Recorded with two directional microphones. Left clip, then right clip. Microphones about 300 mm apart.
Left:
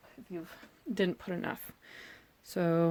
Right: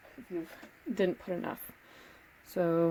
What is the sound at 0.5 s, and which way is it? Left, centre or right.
Speech, left.